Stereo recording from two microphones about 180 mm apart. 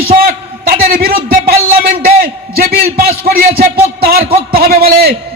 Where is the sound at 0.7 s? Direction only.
55° right (ahead or behind).